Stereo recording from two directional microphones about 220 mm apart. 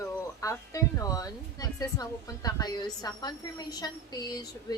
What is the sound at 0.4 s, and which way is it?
A woman's voice, 15° left (ahead or behind).